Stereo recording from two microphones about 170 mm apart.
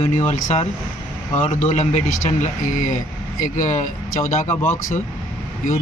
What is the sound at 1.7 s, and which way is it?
Speech, 40° left (ahead or behind).